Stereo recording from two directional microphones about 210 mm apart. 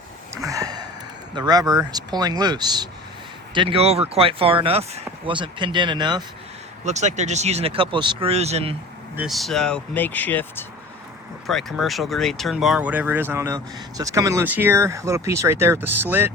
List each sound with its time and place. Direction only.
0.4 s a sound: 15° right (ahead or behind)
1.4 s speech: 20° right (ahead or behind)
6.8 s speech: 35° right (ahead or behind)
9.1 s speech: centre (ahead or behind)